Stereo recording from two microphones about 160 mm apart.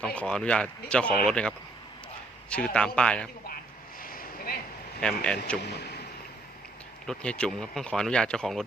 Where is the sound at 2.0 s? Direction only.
5° left (ahead or behind).